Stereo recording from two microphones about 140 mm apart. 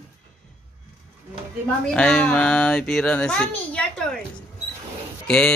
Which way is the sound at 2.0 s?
10° left (ahead or behind).